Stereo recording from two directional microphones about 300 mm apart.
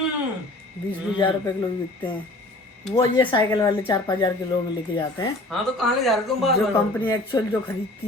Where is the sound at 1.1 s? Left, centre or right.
Centre.